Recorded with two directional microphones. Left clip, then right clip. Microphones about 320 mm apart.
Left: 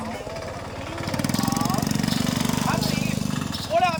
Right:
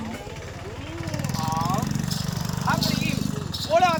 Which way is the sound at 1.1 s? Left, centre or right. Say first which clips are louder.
Left 3 dB; left.